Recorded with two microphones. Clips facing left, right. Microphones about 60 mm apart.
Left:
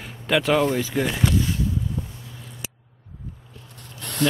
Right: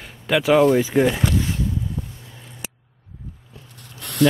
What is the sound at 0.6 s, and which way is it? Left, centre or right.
Speech, centre.